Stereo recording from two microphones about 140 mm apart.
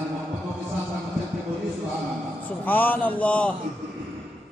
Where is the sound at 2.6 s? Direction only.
10° left (ahead or behind).